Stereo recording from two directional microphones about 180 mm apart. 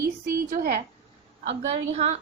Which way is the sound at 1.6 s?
40° right (ahead or behind).